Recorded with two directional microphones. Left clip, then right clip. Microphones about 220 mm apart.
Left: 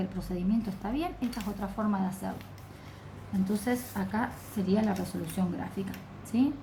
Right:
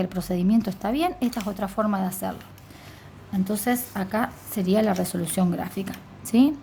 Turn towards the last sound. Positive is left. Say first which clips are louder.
# right 9 dB
turn(degrees=-55)  # may be behind; listen again after turning